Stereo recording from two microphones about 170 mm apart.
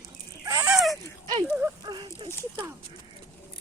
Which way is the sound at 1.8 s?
25° right (ahead or behind).